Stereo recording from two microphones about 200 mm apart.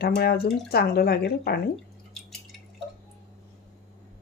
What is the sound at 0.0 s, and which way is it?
A woman's voice, 50° left (ahead or behind).